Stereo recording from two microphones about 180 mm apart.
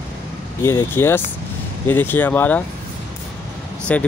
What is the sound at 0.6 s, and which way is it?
Speech, 15° left (ahead or behind).